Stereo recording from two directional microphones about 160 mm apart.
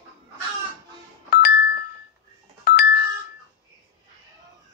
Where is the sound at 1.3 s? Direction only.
80° left.